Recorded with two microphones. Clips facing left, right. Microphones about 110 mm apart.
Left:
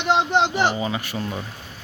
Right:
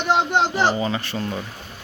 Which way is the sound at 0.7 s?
10° left (ahead or behind).